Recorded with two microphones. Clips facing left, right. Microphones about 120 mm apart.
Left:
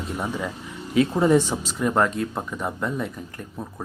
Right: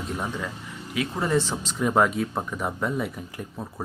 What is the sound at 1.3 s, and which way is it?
Speech, 15° left (ahead or behind).